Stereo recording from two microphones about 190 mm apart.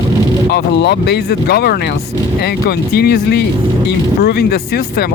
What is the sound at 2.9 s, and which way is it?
Speech, 55° left (ahead or behind).